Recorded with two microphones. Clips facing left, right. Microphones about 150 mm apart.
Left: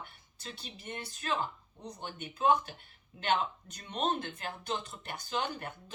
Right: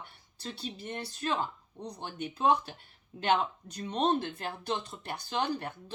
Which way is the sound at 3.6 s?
35° right (ahead or behind).